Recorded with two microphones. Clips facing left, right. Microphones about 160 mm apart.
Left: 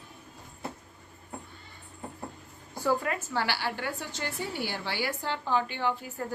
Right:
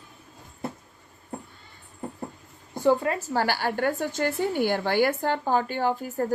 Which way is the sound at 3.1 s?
40° right (ahead or behind).